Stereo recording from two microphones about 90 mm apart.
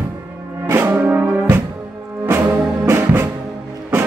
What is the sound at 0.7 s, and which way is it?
Music, 25° right (ahead or behind).